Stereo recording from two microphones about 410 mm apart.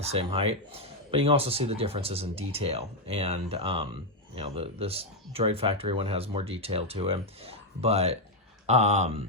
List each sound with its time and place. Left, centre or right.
0.0 s speech: centre